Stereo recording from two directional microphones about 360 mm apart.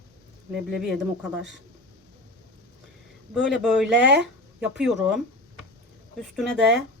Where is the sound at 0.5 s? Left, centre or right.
Centre.